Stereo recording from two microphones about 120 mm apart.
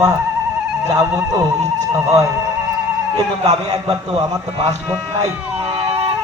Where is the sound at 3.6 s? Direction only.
35° right (ahead or behind).